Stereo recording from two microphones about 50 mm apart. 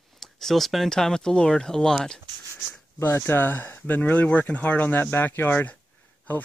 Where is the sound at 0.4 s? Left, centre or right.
Centre.